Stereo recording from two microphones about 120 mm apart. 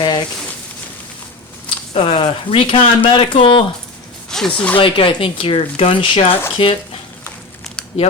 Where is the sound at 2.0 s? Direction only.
45° left (ahead or behind).